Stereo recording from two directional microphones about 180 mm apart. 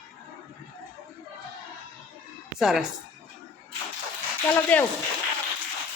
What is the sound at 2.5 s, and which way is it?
Speech, 5° right (ahead or behind).